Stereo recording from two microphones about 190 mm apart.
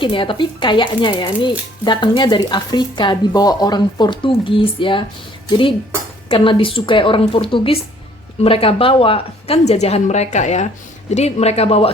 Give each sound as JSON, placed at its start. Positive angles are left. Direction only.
{"t": 0.0, "sound": "speech", "side_deg": 25}
{"t": 5.5, "sound": "dishes", "side_deg": 25}
{"t": 6.2, "sound": "a woman's voice", "side_deg": 25}